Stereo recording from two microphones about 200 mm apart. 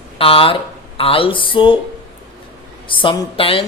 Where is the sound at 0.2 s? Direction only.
25° left (ahead or behind).